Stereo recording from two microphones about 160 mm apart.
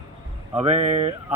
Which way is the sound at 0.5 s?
40° right (ahead or behind).